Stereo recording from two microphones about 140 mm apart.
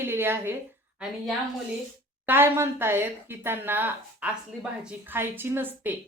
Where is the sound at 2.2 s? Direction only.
15° right (ahead or behind).